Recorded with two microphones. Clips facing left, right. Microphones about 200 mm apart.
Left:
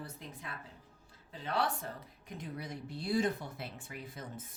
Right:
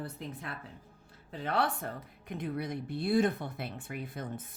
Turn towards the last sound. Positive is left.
turn(degrees=-60)  # may be behind; listen again after turning